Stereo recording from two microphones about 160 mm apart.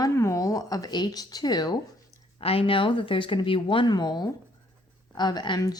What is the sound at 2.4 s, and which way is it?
Speech, 35° left (ahead or behind).